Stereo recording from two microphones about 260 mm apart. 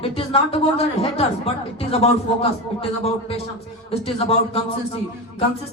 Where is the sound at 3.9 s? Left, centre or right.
Left.